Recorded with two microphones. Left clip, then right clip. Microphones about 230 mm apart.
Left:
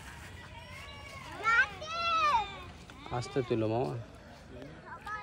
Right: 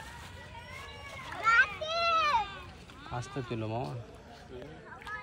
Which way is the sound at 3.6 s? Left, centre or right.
Left.